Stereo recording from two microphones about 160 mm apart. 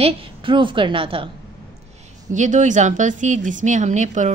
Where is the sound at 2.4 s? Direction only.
50° right (ahead or behind).